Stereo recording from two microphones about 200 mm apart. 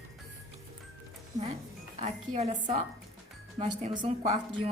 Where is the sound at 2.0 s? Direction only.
35° right (ahead or behind).